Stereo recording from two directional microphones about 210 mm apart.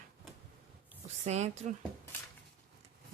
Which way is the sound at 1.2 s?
35° right (ahead or behind).